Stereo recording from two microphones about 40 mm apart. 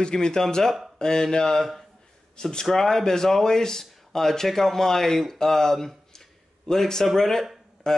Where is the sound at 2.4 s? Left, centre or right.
Centre.